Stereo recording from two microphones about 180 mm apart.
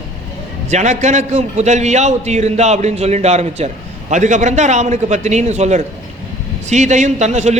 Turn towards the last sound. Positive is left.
turn(degrees=-40)  # may be behind; listen again after turning